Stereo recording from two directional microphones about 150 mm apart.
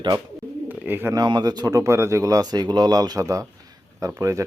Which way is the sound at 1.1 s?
25° right (ahead or behind).